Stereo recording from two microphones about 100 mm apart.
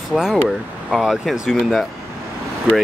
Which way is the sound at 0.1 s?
Centre (ahead or behind).